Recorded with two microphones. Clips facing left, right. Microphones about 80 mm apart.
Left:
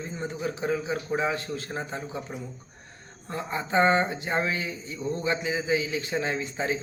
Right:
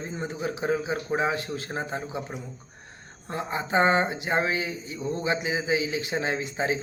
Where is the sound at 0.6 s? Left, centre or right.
Right.